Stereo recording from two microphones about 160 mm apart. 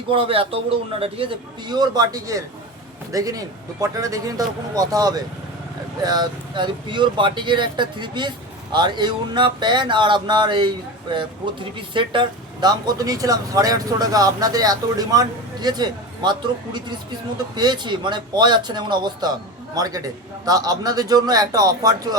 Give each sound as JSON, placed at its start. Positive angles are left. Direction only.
{"t": 0.1, "sound": "a man's voice", "side_deg": -35}
{"t": 11.8, "sound": "speech", "side_deg": -30}